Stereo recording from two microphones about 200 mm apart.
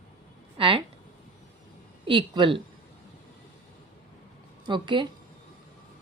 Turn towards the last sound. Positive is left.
turn(degrees=-25)  # may be behind; listen again after turning